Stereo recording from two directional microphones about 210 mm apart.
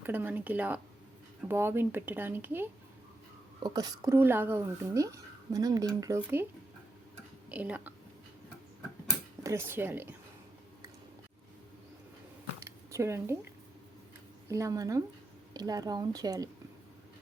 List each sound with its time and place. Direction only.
0.0 s speech: 10° right (ahead or behind)
7.5 s speech: 10° right (ahead or behind)
9.4 s a woman's voice: 15° right (ahead or behind)
12.5 s a sound: 15° right (ahead or behind)
14.5 s speech: 15° right (ahead or behind)